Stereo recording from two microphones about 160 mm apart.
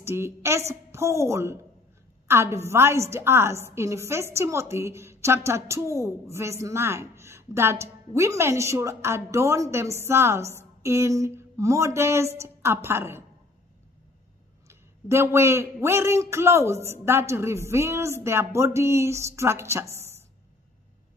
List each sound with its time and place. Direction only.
0.0 s a woman's voice: 15° right (ahead or behind)
14.7 s a woman's voice: 15° right (ahead or behind)